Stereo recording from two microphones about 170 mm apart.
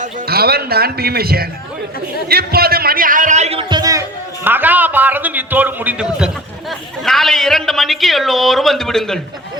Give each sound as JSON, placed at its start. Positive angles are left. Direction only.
{"t": 0.3, "sound": "a man's voice", "side_deg": -65}
{"t": 2.3, "sound": "music", "side_deg": -65}
{"t": 4.4, "sound": "a man's voice", "side_deg": -10}